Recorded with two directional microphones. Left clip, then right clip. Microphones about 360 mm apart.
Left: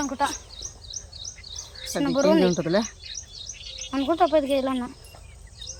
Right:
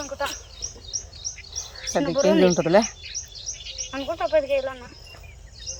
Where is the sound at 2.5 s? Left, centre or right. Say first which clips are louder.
Right 6 dB; centre.